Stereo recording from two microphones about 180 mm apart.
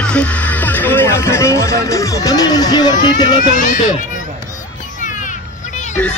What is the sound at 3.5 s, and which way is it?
Speech, 45° left (ahead or behind).